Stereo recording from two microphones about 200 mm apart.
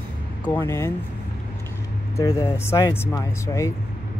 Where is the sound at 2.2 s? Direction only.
15° left (ahead or behind).